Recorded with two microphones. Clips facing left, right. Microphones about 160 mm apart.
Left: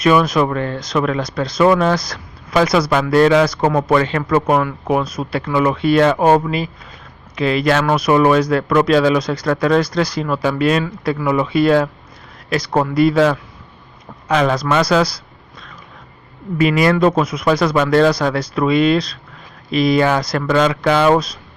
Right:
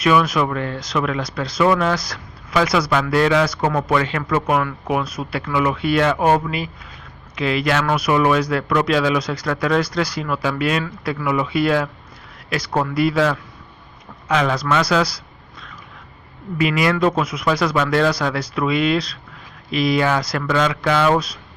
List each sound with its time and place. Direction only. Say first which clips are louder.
0.0 s speech: left 3 dB; 40° left (ahead or behind)
16.6 s speech: left 4 dB; 40° left (ahead or behind)